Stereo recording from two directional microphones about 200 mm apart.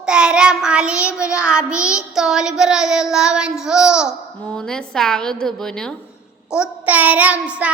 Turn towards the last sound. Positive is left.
turn(degrees=-5)  # may be behind; listen again after turning